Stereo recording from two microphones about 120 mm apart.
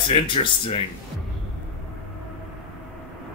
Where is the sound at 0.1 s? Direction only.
45° left (ahead or behind).